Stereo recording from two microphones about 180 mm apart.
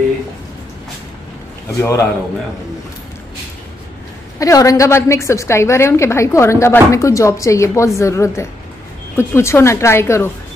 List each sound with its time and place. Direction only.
1.8 s a woman's voice: 15° left (ahead or behind)
4.4 s a woman's voice: 20° left (ahead or behind)